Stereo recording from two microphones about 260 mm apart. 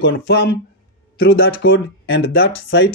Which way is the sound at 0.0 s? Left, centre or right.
Left.